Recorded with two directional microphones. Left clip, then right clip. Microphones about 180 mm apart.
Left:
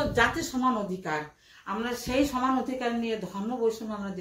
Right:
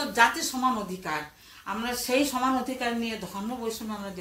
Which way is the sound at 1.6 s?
15° right (ahead or behind).